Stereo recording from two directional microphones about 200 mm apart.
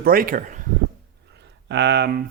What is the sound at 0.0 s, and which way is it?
Speech, 45° right (ahead or behind).